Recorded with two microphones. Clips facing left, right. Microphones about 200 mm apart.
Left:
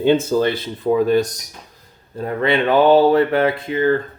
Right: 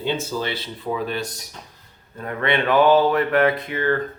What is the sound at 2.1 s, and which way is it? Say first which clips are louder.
Speech: left 4 dB; 30° left (ahead or behind).